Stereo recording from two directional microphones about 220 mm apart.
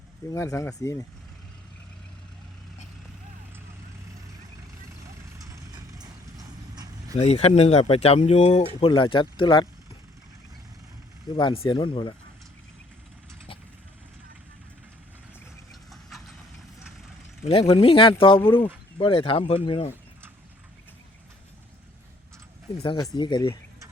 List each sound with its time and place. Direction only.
0.3 s speech: 15° left (ahead or behind)
6.0 s horse: 15° right (ahead or behind)
7.2 s speech: 30° left (ahead or behind)
11.3 s speech: 25° left (ahead or behind)
15.7 s vehicle: centre (ahead or behind)
17.4 s speech: 25° left (ahead or behind)
22.8 s speech: 25° left (ahead or behind)